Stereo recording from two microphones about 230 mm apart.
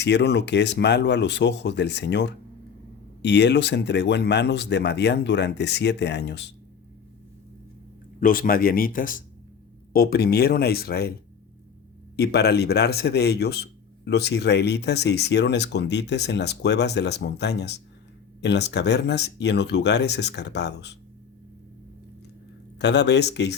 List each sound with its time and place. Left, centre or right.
0.0 s a man's voice: left
8.2 s a man's voice: left
12.1 s a man's voice: left
22.8 s a man's voice: left